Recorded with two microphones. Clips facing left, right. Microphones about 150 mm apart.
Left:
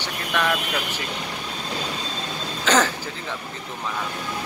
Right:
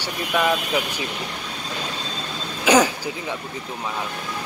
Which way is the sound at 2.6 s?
10° right (ahead or behind).